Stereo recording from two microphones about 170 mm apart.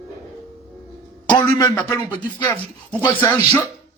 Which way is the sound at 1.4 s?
15° left (ahead or behind).